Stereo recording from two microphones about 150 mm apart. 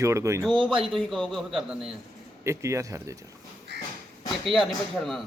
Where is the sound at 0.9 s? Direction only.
Centre (ahead or behind).